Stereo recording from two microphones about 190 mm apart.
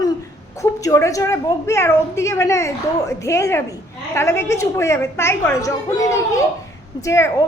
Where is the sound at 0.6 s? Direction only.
15° left (ahead or behind).